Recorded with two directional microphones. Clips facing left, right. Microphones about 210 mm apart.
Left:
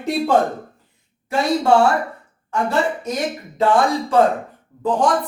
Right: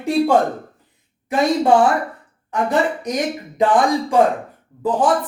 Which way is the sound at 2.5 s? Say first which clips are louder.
Right 1 dB; 15° right (ahead or behind).